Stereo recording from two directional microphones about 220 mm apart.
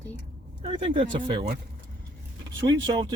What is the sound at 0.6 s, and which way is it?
Speech, 25° right (ahead or behind).